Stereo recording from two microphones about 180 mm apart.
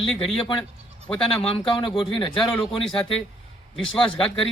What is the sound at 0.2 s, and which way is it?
Speech, 30° left (ahead or behind).